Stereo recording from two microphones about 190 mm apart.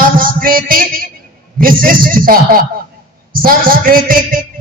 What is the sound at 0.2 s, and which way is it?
A man's voice, 50° right (ahead or behind).